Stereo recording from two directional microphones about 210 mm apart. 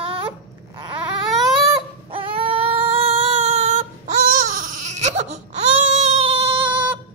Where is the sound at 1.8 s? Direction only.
25° right (ahead or behind).